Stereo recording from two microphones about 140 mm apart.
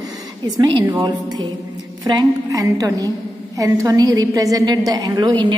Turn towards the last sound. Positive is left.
turn(degrees=-30)  # may be behind; listen again after turning